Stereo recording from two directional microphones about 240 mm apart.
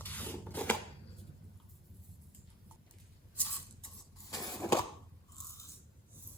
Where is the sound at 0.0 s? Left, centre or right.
Centre.